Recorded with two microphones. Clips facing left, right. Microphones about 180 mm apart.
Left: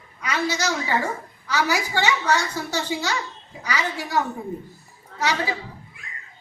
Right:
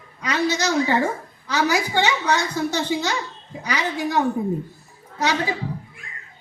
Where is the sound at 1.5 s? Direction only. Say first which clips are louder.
Right 2 dB; 15° right (ahead or behind).